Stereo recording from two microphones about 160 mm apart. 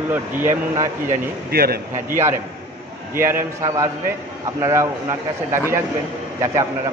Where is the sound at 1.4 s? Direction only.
75° right (ahead or behind).